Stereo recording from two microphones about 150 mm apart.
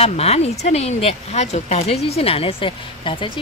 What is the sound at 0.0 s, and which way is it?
Speech, 45° left (ahead or behind).